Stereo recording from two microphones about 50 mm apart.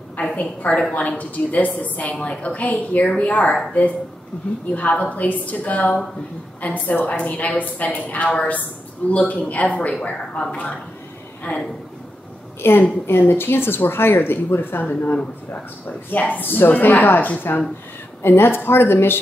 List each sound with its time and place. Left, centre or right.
0.2 s speech: left
4.7 s speech: left
12.6 s speech: left
18.2 s speech: left